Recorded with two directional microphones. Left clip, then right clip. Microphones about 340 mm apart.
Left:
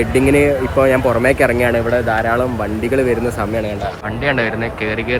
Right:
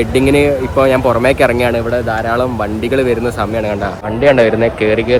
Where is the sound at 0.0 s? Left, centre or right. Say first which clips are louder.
Right 2 dB; centre.